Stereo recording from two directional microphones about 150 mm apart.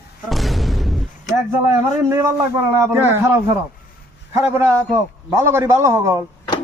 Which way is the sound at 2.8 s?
20° right (ahead or behind).